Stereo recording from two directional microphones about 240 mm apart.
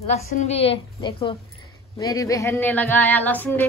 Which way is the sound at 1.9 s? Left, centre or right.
Centre.